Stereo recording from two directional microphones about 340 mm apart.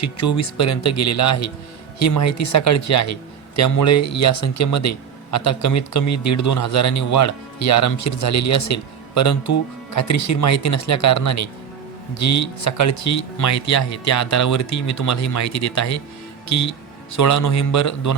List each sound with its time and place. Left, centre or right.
0.0 s speech: left
17.1 s speech: left